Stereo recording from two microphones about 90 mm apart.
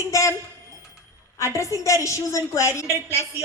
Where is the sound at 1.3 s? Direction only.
35° left (ahead or behind).